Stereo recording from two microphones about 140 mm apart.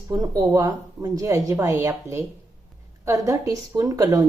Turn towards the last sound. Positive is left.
turn(degrees=-25)  # may be behind; listen again after turning